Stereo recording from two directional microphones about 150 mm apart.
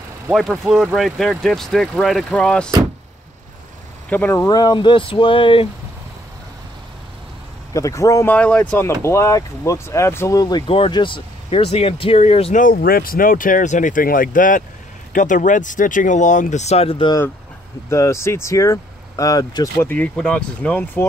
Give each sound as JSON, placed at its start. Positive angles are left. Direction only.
{"t": 0.3, "sound": "speech", "side_deg": 0}
{"t": 4.1, "sound": "speech", "side_deg": 15}
{"t": 4.5, "sound": "speech", "side_deg": 30}
{"t": 7.7, "sound": "speech", "side_deg": 20}
{"t": 8.4, "sound": "speech", "side_deg": 5}
{"t": 10.7, "sound": "speech", "side_deg": 35}
{"t": 12.5, "sound": "speech", "side_deg": 70}
{"t": 17.8, "sound": "speech", "side_deg": 20}